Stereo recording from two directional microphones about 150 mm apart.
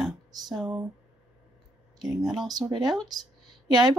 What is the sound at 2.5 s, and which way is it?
Speech, 25° right (ahead or behind).